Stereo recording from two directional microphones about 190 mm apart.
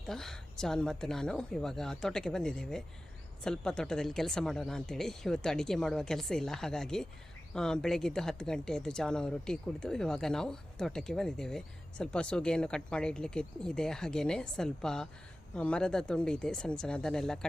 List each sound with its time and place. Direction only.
0.1 s speech: centre (ahead or behind)